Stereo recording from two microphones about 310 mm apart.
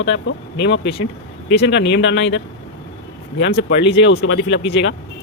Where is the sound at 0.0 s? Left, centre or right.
Left.